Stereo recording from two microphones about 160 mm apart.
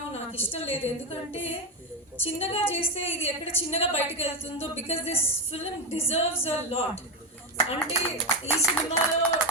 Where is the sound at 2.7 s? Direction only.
40° left (ahead or behind).